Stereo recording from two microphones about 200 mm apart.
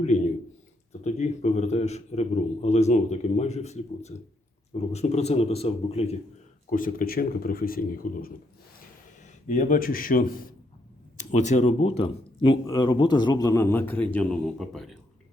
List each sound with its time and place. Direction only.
1.0 s a man's voice: 35° left (ahead or behind)
6.7 s speech: 45° left (ahead or behind)
9.5 s a man's voice: 40° left (ahead or behind); by 14.9 s centre (ahead or behind)